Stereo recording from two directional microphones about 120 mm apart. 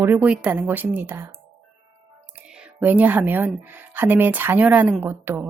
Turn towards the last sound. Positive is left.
turn(degrees=-20)  # may be behind; listen again after turning